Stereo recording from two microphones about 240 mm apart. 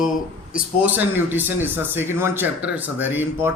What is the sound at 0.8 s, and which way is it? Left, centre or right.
Speech, centre.